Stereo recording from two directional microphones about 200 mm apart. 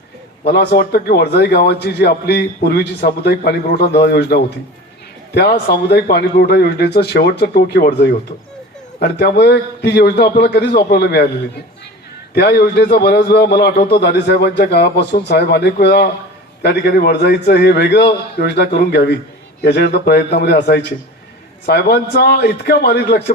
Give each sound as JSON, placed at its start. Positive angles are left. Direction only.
{"t": 0.4, "sound": "a man's voice", "side_deg": 55}
{"t": 12.3, "sound": "speech", "side_deg": 55}